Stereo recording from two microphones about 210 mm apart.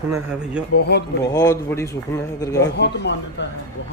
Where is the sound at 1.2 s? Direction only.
15° left (ahead or behind).